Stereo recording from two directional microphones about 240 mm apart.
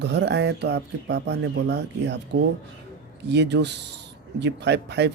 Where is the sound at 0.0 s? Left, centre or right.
Right.